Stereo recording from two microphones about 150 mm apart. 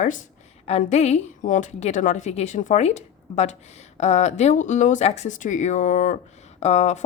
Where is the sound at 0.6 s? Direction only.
45° left (ahead or behind).